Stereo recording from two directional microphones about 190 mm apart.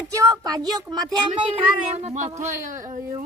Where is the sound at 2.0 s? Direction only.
40° right (ahead or behind).